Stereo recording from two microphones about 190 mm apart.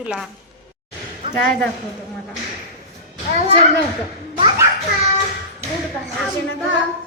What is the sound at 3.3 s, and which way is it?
Speech, 35° right (ahead or behind).